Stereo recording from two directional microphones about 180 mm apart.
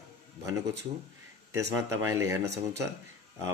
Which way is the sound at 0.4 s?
20° right (ahead or behind).